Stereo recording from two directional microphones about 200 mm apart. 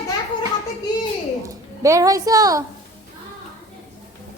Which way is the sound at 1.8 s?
15° right (ahead or behind).